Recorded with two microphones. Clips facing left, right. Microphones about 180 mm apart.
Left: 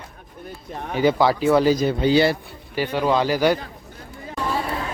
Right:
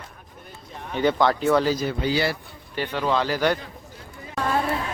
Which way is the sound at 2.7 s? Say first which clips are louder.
Left 4 dB; 10° left (ahead or behind).